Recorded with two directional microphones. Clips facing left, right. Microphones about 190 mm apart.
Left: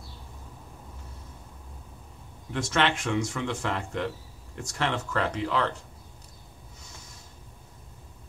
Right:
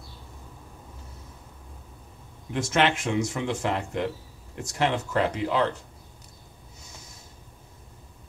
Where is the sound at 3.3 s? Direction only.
20° right (ahead or behind).